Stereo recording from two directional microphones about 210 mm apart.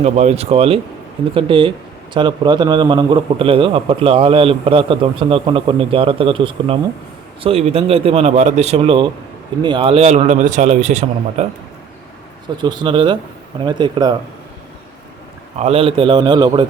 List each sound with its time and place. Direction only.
0.0 s a man's voice: 30° right (ahead or behind)
12.6 s a man's voice: 20° right (ahead or behind)
15.5 s a man's voice: 30° right (ahead or behind)